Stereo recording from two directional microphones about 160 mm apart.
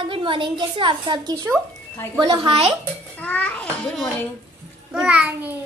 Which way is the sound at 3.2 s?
10° left (ahead or behind).